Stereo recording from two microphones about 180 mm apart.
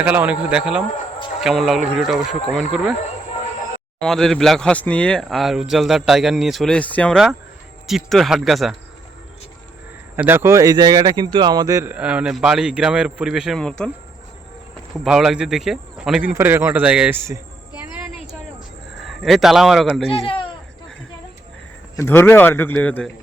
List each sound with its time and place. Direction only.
0.0 s speech: 10° right (ahead or behind)
4.0 s speech: centre (ahead or behind)
10.2 s speech: 10° right (ahead or behind); by 13.9 s 5° left (ahead or behind)
15.0 s speech: centre (ahead or behind)
17.9 s a sound: 10° right (ahead or behind)
18.9 s speech: centre (ahead or behind)
20.1 s speech: 30° left (ahead or behind)
21.9 s a man's voice: 10° left (ahead or behind)